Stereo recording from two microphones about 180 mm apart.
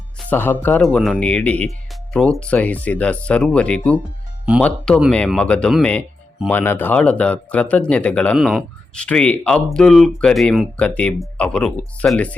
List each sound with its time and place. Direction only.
0.3 s speech: 10° left (ahead or behind)
5.1 s speech: 5° left (ahead or behind)